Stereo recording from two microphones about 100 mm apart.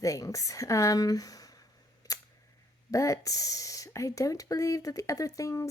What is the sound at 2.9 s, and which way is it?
Speech, 30° left (ahead or behind).